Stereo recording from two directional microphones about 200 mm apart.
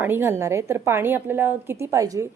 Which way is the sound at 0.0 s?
10° right (ahead or behind).